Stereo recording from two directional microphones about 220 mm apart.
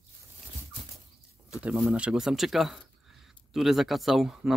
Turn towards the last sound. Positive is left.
turn(degrees=0)  # may be behind; listen again after turning